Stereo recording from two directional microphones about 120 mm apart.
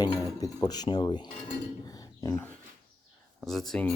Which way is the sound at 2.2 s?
25° left (ahead or behind).